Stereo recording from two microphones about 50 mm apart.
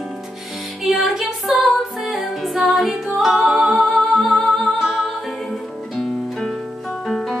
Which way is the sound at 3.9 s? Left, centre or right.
Centre.